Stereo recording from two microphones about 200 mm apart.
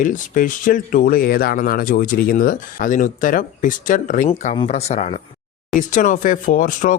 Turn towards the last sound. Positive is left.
turn(degrees=40)  # may be behind; listen again after turning